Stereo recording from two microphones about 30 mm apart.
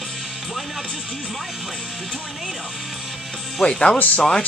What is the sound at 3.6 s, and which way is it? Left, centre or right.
Speech, left.